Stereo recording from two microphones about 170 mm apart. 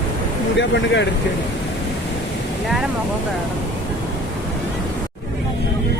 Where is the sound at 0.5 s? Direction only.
90° left.